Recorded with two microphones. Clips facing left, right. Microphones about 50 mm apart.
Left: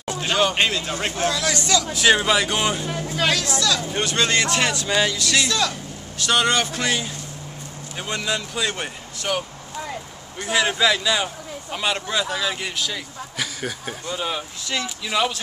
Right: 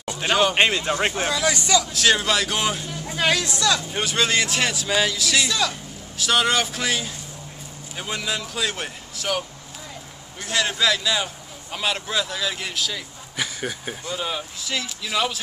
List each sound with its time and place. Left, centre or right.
0.3 s speech: centre
0.6 s speech: right
1.9 s speech: centre
3.2 s speech: centre
3.9 s speech: centre
10.4 s speech: centre
13.4 s speech: centre
14.0 s speech: centre